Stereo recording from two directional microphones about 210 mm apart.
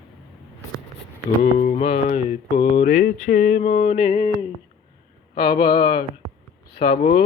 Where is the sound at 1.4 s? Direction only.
35° left (ahead or behind).